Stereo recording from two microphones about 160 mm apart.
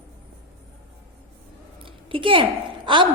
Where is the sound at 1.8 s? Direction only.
35° right (ahead or behind).